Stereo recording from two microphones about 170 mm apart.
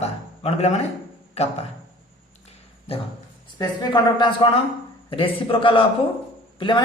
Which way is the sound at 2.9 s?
35° left (ahead or behind).